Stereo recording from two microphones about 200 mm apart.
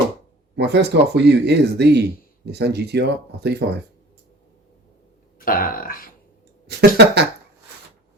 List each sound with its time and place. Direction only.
0.5 s speech: 55° right (ahead or behind)
5.5 s speech: 45° left (ahead or behind)
6.7 s speech: 55° right (ahead or behind)